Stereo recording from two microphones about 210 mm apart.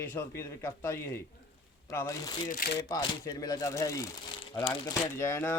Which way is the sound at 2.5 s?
45° left (ahead or behind).